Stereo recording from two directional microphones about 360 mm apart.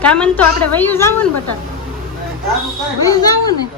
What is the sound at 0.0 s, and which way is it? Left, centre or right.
A woman's voice, centre.